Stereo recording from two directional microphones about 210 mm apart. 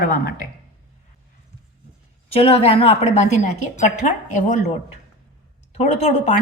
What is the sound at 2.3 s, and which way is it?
A woman's voice, 30° left (ahead or behind).